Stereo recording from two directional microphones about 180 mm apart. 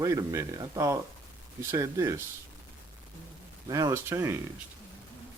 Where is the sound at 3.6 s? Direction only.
20° right (ahead or behind).